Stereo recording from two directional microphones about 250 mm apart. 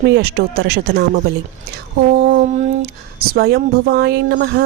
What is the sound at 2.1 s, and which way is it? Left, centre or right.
Speech, right.